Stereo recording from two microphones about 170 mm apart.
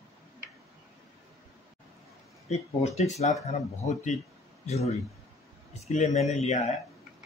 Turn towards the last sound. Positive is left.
turn(degrees=40)  # may be behind; listen again after turning